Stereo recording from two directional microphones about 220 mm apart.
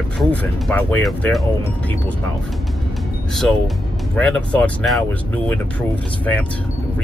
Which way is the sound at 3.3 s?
Centre (ahead or behind).